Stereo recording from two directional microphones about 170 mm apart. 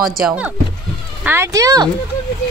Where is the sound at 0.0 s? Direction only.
5° right (ahead or behind).